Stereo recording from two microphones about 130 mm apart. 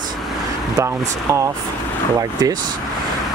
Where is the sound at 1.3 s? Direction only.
25° right (ahead or behind).